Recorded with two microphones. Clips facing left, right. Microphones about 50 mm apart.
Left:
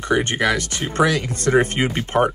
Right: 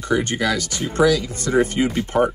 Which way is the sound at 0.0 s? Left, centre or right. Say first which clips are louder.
Left 1 dB; left.